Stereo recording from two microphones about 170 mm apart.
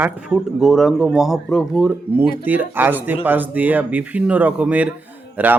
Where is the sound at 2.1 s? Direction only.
10° right (ahead or behind).